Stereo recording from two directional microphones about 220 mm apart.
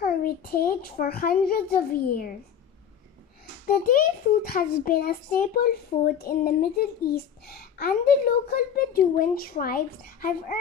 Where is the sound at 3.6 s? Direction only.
40° left (ahead or behind).